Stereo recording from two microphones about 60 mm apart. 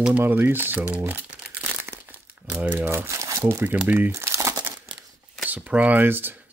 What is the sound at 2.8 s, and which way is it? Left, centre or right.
Speech, right.